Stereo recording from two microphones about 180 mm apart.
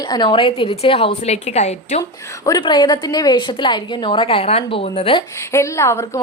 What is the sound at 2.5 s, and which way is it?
A woman's voice, 25° left (ahead or behind).